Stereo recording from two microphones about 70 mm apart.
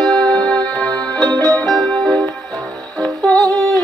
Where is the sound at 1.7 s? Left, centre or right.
Centre.